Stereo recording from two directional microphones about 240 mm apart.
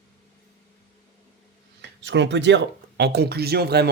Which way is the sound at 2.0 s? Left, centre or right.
Right.